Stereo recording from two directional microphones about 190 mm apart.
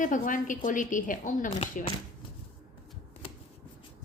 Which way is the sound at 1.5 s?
30° left (ahead or behind).